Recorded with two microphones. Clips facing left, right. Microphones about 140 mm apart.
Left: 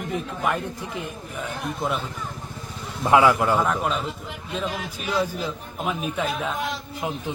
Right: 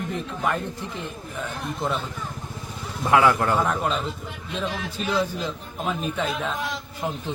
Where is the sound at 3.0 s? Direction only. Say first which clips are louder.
Left 1 dB; 15° left (ahead or behind).